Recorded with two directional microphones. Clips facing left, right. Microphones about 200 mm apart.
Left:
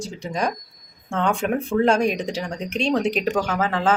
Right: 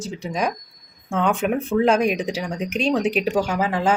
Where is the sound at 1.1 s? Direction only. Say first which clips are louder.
Right 1 dB; 5° right (ahead or behind).